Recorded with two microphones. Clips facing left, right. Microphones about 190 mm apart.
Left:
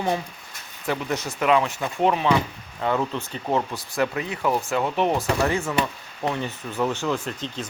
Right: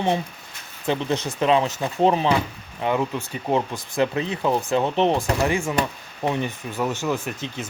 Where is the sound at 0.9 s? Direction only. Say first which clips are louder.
Right 3 dB; 25° right (ahead or behind).